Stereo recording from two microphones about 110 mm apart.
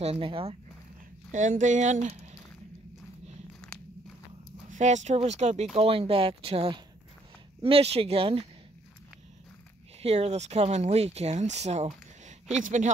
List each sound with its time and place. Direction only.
0.0 s speech: 60° right (ahead or behind)
1.4 s speech: 90° right
4.7 s speech: 90° right
5.8 s speech: 60° right (ahead or behind)
10.0 s speech: 70° right (ahead or behind); by 12.4 s 90° right